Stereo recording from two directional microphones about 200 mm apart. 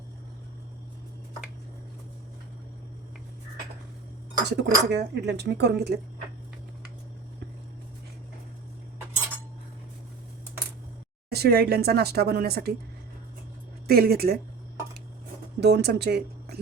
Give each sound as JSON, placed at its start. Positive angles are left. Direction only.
{"t": 4.4, "sound": "speech", "side_deg": -55}
{"t": 11.3, "sound": "speech", "side_deg": -50}
{"t": 13.8, "sound": "speech", "side_deg": -50}
{"t": 15.6, "sound": "speech", "side_deg": -55}